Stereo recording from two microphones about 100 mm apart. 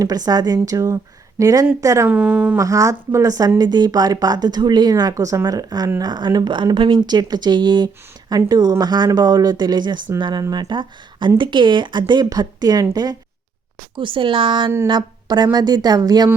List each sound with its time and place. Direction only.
0.0 s speech: 40° right (ahead or behind)
2.0 s speech: 10° right (ahead or behind)
2.6 s speech: 35° right (ahead or behind)
13.9 s speech: 55° right (ahead or behind)